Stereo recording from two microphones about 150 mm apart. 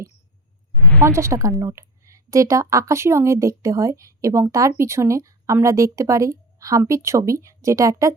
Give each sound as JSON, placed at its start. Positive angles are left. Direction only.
{"t": 1.0, "sound": "a woman's voice", "side_deg": -20}